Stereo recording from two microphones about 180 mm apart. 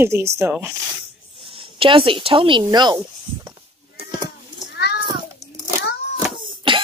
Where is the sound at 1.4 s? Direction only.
30° right (ahead or behind).